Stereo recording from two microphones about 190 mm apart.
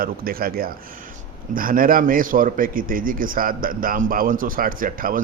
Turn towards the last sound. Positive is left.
turn(degrees=-45)  # may be behind; listen again after turning